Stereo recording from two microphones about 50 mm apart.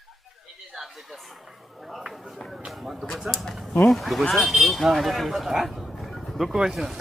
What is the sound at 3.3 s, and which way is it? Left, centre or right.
Bird, centre.